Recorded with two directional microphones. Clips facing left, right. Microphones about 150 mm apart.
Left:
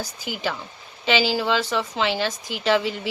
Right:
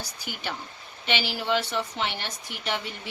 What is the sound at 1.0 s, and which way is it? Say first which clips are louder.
A woman's voice: left 7 dB; 90° left.